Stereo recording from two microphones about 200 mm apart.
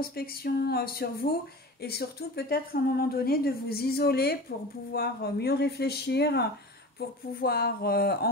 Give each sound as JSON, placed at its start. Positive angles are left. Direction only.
{"t": 0.0, "sound": "speech", "side_deg": 50}